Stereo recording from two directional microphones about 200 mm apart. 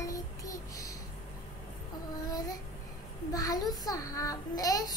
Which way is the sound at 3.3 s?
20° left (ahead or behind).